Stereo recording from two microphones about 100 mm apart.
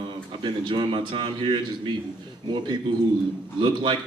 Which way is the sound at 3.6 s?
50° right (ahead or behind).